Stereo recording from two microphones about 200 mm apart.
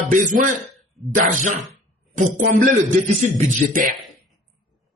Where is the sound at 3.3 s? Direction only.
45° right (ahead or behind).